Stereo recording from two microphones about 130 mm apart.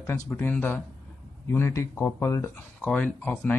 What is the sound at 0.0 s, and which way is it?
Speech, 15° left (ahead or behind).